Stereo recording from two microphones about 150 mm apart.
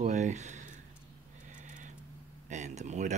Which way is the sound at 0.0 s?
50° right (ahead or behind).